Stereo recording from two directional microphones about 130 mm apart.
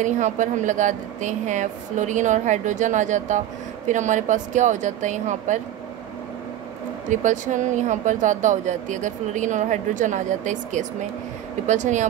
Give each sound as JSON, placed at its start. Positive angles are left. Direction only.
{"t": 0.0, "sound": "a woman's voice", "side_deg": -70}
{"t": 7.1, "sound": "a woman's voice", "side_deg": -70}